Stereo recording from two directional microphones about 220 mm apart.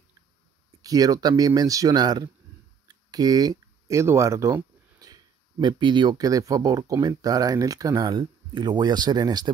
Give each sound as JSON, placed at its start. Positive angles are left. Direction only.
{"t": 0.8, "sound": "speech", "side_deg": -15}